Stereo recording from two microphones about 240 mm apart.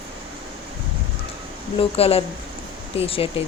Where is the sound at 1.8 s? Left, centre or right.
Left.